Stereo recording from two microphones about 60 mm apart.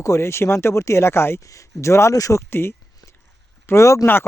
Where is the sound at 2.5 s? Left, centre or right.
Left.